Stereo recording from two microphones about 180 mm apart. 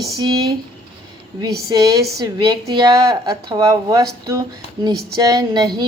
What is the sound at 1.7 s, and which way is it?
Speech, 20° right (ahead or behind).